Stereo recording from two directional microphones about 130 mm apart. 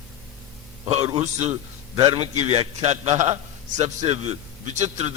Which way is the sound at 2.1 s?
55° right (ahead or behind).